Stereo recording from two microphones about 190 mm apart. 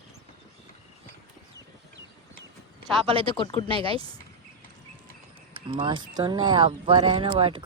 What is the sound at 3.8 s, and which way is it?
Speech, 30° right (ahead or behind).